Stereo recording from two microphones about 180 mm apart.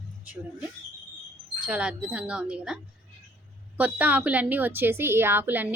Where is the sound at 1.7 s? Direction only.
5° right (ahead or behind).